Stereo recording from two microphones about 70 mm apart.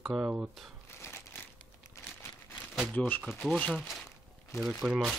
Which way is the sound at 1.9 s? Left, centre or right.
Left.